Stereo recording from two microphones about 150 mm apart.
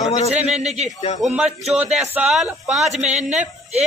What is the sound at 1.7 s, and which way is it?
A man's voice, 5° right (ahead or behind).